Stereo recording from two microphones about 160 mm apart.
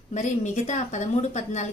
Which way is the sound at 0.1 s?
50° left (ahead or behind).